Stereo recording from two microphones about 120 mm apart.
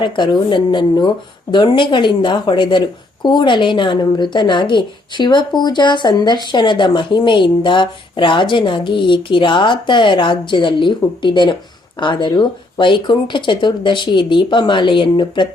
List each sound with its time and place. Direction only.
0.0 s a woman's voice: 40° left (ahead or behind)